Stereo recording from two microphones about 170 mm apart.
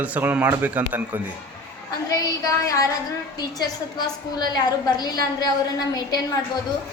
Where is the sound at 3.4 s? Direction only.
25° left (ahead or behind).